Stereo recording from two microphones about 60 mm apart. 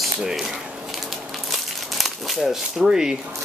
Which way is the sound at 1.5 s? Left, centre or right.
Centre.